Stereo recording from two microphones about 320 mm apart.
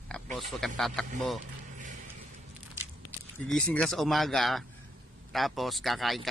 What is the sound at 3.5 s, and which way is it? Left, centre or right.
Speech, centre.